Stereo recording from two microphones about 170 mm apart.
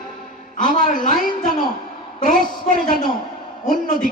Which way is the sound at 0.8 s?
50° left (ahead or behind).